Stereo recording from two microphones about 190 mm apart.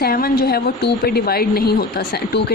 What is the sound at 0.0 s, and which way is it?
A woman's voice, 50° left (ahead or behind).